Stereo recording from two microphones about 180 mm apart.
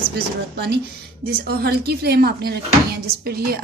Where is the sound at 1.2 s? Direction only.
60° right (ahead or behind).